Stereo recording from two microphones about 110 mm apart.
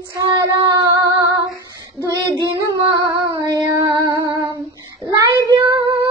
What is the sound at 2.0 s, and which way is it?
Child singing, 35° right (ahead or behind).